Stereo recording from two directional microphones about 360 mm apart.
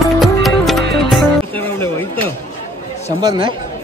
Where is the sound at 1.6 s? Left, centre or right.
Centre.